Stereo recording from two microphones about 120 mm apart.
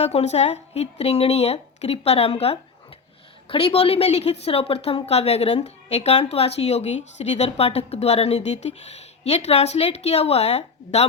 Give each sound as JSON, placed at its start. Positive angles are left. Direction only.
{"t": 0.0, "sound": "a woman's voice", "side_deg": 65}